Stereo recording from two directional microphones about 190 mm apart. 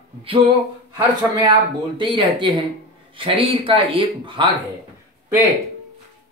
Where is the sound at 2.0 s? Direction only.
25° right (ahead or behind).